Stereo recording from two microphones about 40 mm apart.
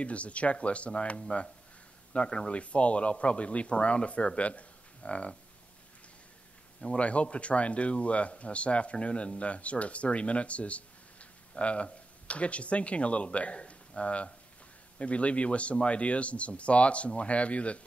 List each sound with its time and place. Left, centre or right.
0.0 s speech: left
2.2 s speech: left
2.6 s speech: left
6.8 s speech: left